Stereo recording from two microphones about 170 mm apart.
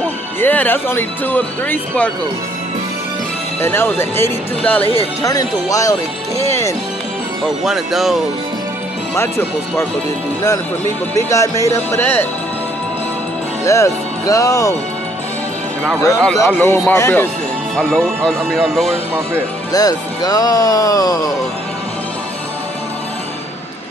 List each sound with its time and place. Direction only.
0.4 s speech: 10° left (ahead or behind)
3.6 s speech: 15° left (ahead or behind)
7.6 s speech: centre (ahead or behind)
11.2 s speech: 20° left (ahead or behind)
13.7 s speech: 20° left (ahead or behind)
16.3 s speech: 10° left (ahead or behind)
17.7 s speech: 5° left (ahead or behind)
19.7 s speech: 20° left (ahead or behind)